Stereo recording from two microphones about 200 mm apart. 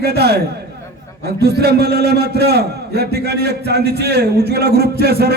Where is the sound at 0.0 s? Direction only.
55° right (ahead or behind).